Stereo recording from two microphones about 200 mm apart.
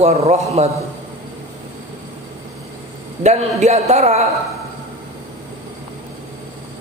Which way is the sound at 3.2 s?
35° right (ahead or behind).